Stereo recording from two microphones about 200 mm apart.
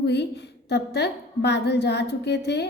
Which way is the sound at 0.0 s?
60° left (ahead or behind).